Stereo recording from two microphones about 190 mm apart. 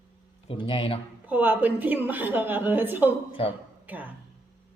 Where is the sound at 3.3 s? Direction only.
30° left (ahead or behind).